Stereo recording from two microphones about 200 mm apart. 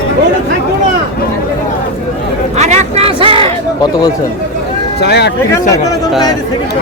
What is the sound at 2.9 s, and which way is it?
Speech, 30° right (ahead or behind).